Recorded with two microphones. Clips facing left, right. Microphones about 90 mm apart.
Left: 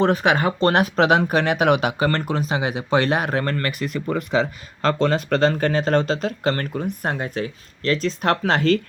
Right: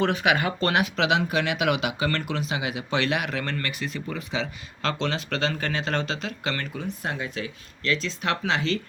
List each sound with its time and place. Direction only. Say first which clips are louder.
0.1 s speech: left 5 dB; 40° left (ahead or behind)